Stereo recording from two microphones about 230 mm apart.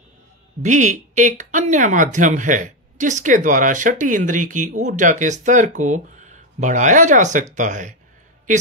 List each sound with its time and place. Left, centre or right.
0.6 s speech: right